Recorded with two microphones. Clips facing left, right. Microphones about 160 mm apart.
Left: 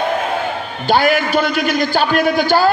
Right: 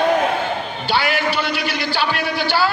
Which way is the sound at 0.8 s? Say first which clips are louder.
Left 6 dB; 45° left (ahead or behind).